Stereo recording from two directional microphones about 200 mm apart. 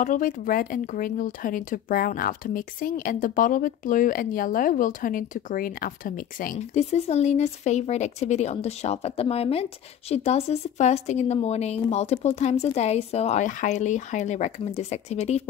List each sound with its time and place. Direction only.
0.0 s speech: 40° left (ahead or behind)